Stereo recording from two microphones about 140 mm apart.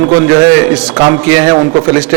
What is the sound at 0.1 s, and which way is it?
A man's voice, 15° right (ahead or behind).